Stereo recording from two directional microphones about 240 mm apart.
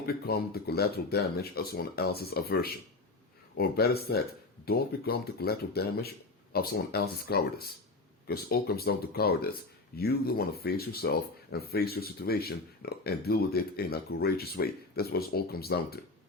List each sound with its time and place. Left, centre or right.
0.0 s speech: left